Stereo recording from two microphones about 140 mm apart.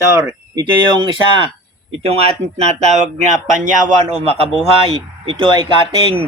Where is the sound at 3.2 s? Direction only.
60° right (ahead or behind); by 6.2 s 40° right (ahead or behind).